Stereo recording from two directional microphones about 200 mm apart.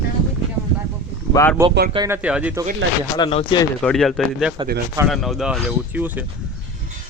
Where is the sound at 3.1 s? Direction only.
25° left (ahead or behind).